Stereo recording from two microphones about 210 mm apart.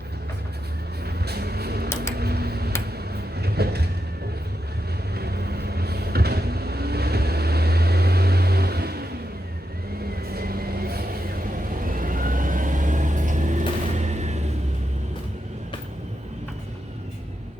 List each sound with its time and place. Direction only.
1.0 s vehicle: 50° right (ahead or behind)
2.1 s typing: 50° right (ahead or behind)
3.3 s vehicle: 50° right (ahead or behind)
5.1 s vehicle: 50° right (ahead or behind)
10.3 s vehicle: 45° right (ahead or behind)